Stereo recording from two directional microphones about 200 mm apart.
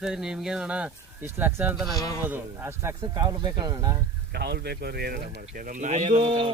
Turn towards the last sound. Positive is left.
turn(degrees=-30)  # may be behind; listen again after turning